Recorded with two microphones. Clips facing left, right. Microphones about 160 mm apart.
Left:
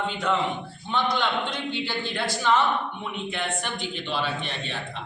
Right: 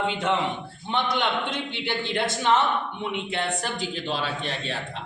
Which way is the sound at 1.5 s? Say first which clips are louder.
Left 1 dB; 60° right (ahead or behind).